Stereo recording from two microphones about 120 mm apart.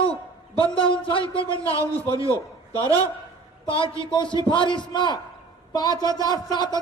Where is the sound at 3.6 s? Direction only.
45° left (ahead or behind).